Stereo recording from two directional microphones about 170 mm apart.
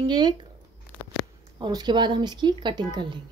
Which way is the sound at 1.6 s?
25° right (ahead or behind).